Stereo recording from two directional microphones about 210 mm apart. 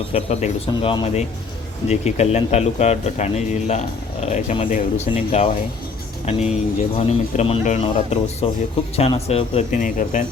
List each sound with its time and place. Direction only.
0.1 s a man's voice: 30° left (ahead or behind)